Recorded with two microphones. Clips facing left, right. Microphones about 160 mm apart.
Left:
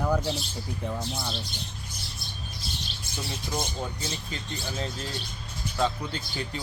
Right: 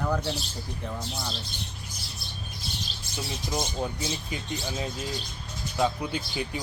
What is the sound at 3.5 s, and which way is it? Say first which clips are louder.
Speech: right 3 dB; 10° right (ahead or behind).